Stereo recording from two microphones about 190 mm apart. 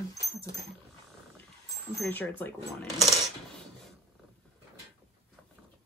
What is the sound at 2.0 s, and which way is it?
Speech, 10° left (ahead or behind).